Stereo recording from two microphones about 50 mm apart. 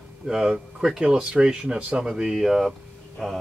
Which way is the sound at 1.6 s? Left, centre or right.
Right.